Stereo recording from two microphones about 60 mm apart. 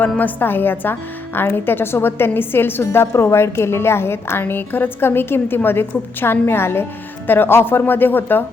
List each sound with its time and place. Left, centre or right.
0.0 s a woman's voice: left